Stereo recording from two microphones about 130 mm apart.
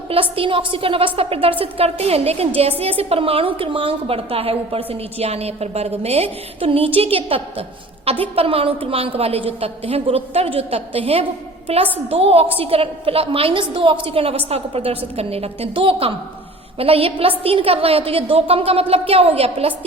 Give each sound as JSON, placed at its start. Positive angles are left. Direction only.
{"t": 0.1, "sound": "a woman's voice", "side_deg": -45}